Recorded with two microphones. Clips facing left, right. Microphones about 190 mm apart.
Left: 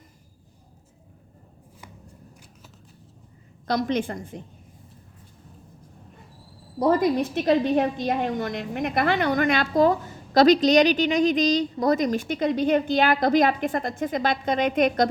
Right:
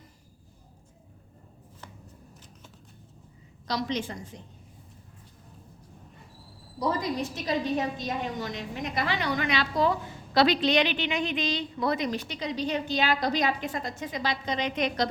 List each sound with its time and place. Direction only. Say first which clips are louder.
3.7 s a woman's voice: left 6 dB; 55° left (ahead or behind)
6.7 s a woman's voice: left 8 dB; 55° left (ahead or behind)